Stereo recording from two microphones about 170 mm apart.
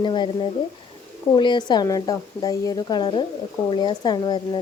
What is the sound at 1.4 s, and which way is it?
Speech, 25° left (ahead or behind).